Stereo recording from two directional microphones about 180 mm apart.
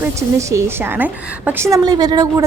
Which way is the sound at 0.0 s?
15° right (ahead or behind).